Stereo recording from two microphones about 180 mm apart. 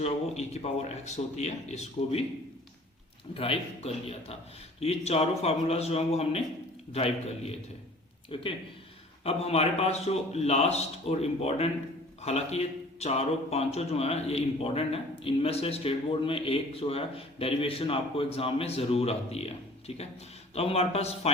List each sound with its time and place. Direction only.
0.0 s speech: 35° left (ahead or behind)
3.3 s speech: 30° left (ahead or behind)